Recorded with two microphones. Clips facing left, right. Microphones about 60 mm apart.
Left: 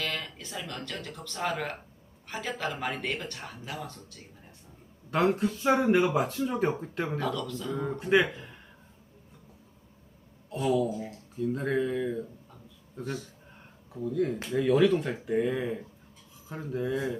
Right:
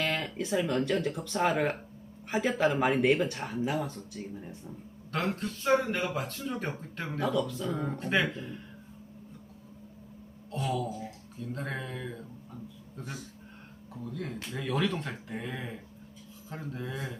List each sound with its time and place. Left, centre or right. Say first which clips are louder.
0.0 s speech: right 4 dB; centre
5.1 s speech: left 7 dB; centre
7.2 s speech: right 2 dB; centre
7.8 s speech: left 5 dB; centre
10.5 s speech: left 6 dB; centre
13.9 s speech: left 9 dB; centre